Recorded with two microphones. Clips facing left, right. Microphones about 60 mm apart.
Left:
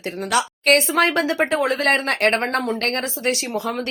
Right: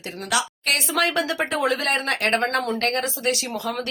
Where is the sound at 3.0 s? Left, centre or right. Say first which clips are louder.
Left 1 dB; left.